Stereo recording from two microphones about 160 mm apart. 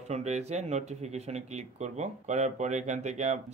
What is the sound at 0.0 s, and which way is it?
Speech, 45° right (ahead or behind).